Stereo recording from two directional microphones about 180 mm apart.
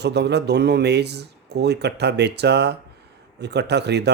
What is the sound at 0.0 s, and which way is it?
Speech, 70° right (ahead or behind).